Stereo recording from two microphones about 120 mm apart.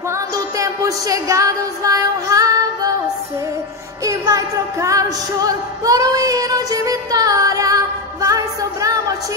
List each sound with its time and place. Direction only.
0.6 s child singing: 30° right (ahead or behind)
4.0 s music: 30° right (ahead or behind)